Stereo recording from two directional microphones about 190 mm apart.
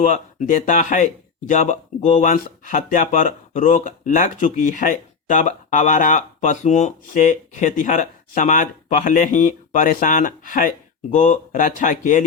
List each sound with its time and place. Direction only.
0.0 s speech: 40° left (ahead or behind)